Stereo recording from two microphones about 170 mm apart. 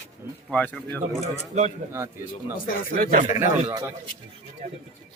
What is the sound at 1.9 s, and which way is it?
Speech, 15° right (ahead or behind).